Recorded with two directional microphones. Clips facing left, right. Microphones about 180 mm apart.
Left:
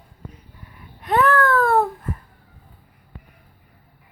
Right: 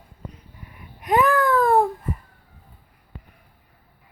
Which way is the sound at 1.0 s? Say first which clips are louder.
Left 1 dB; 15° right (ahead or behind).